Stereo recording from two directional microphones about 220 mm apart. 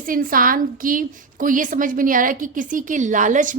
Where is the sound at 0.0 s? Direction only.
40° right (ahead or behind).